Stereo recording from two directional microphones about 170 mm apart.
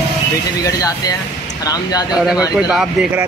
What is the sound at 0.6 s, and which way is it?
Speech, 20° left (ahead or behind).